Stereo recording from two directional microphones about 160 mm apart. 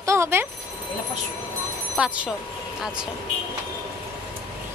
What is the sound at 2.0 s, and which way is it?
Speech, 5° right (ahead or behind).